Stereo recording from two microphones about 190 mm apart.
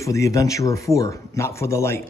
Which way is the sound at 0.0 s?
15° left (ahead or behind).